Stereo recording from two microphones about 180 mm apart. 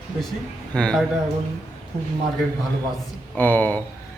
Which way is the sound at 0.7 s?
5° left (ahead or behind).